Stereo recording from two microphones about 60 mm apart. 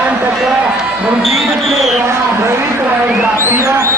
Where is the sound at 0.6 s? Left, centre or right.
Centre.